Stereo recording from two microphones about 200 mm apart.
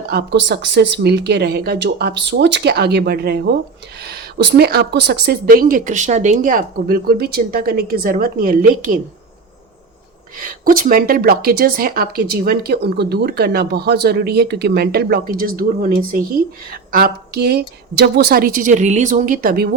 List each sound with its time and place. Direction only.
0.1 s speech: 55° right (ahead or behind)
10.3 s speech: 45° right (ahead or behind)